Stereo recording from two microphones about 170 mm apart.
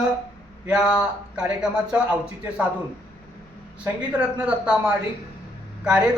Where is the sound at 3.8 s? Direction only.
10° right (ahead or behind).